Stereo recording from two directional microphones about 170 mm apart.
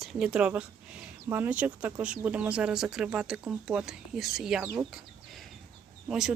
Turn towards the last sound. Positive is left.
turn(degrees=-5)  # may be behind; listen again after turning